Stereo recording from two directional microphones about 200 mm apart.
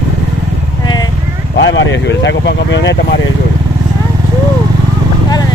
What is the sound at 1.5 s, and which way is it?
Speech, 65° left (ahead or behind).